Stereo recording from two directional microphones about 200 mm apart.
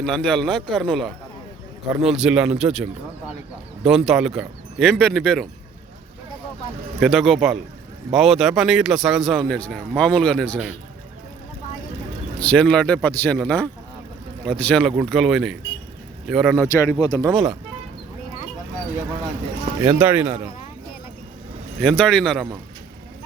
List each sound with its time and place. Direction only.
0.0 s a man's voice: 5° left (ahead or behind)
3.8 s a man's voice: centre (ahead or behind)
7.0 s a man's voice: centre (ahead or behind)
12.4 s a man's voice: 5° left (ahead or behind)
16.6 s speech: 15° left (ahead or behind)
17.2 s a man's voice: centre (ahead or behind)
19.8 s speech: 10° right (ahead or behind)
21.8 s a man's voice: centre (ahead or behind)